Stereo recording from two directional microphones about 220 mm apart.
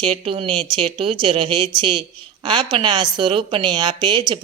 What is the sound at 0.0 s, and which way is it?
A woman's voice, 25° right (ahead or behind).